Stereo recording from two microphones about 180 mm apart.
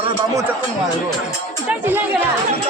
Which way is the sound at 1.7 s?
10° right (ahead or behind).